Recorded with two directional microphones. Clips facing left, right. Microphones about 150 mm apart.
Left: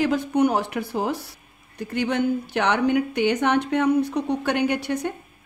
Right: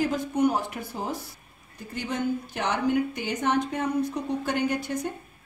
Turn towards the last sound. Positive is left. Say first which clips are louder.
# left 4 dB
turn(degrees=70)  # may be behind; listen again after turning